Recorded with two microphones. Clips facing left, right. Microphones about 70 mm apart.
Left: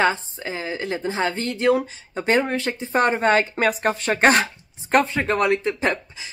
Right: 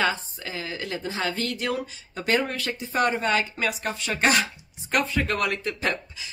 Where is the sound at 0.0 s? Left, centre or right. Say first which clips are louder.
Left 5 dB; left.